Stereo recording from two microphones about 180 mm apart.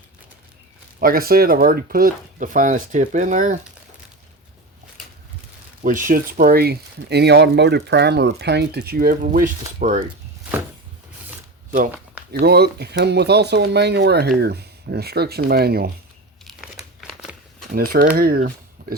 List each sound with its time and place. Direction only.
0.9 s speech: 55° right (ahead or behind)
6.1 s speech: 50° right (ahead or behind)
12.3 s speech: 65° right (ahead or behind)
17.0 s a sound: 5° right (ahead or behind)
17.7 s speech: 55° right (ahead or behind)